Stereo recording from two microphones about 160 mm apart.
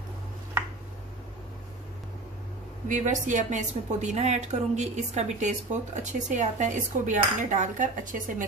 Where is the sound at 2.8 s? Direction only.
50° right (ahead or behind).